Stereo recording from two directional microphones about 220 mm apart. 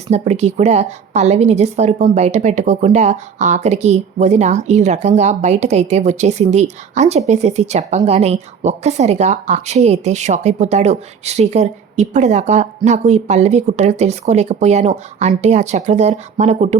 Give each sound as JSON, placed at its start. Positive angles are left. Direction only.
{"t": 0.1, "sound": "a woman's voice", "side_deg": -30}